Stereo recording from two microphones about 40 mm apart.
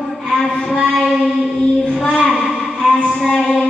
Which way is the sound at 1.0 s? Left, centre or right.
Centre.